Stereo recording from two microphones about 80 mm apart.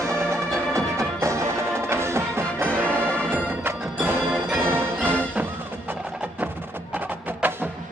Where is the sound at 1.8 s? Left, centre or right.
Right.